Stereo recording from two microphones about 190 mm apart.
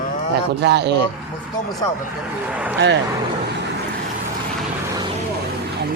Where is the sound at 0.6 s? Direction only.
65° right (ahead or behind).